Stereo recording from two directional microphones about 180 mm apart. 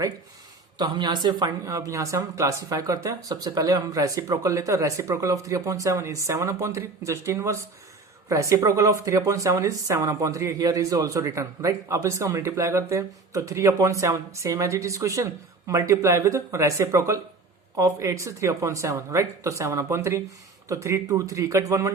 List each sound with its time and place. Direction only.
0.8 s speech: 25° right (ahead or behind)